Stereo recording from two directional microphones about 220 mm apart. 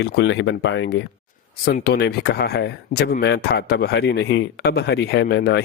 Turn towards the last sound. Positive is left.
turn(degrees=45)  # may be behind; listen again after turning